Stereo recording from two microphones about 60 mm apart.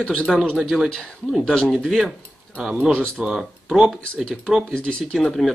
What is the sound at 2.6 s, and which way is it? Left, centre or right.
Speech, centre.